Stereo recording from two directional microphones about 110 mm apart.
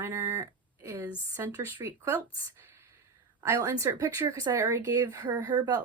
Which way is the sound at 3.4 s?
30° right (ahead or behind).